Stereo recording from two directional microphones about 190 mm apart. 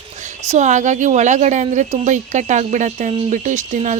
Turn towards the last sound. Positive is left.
turn(degrees=-40)  # may be behind; listen again after turning